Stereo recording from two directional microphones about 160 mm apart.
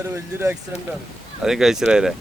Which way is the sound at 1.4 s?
5° right (ahead or behind).